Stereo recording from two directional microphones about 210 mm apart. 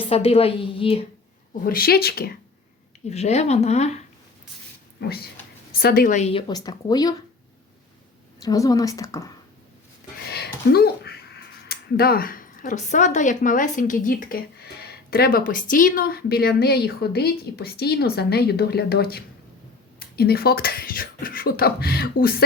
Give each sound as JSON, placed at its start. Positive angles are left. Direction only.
{"t": 0.0, "sound": "a woman's voice", "side_deg": 30}
{"t": 1.6, "sound": "speech", "side_deg": 45}
{"t": 3.1, "sound": "speech", "side_deg": 30}
{"t": 4.9, "sound": "speech", "side_deg": 50}
{"t": 6.5, "sound": "a woman's voice", "side_deg": 20}
{"t": 8.4, "sound": "a woman's voice", "side_deg": 15}
{"t": 10.2, "sound": "speech", "side_deg": 50}